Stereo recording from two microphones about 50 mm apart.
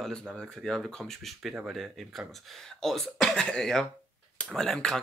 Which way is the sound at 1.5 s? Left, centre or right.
Centre.